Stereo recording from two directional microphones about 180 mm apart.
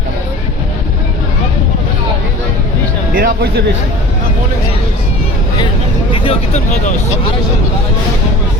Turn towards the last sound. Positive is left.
turn(degrees=40)  # may be behind; listen again after turning